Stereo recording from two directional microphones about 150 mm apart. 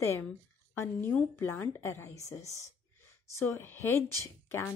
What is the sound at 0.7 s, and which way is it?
Speech, 15° left (ahead or behind).